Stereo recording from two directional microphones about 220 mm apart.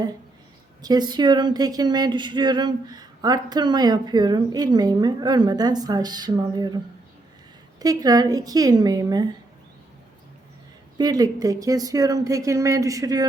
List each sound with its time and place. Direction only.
0.8 s speech: 20° right (ahead or behind)
7.8 s speech: 15° right (ahead or behind)
10.9 s speech: 20° right (ahead or behind)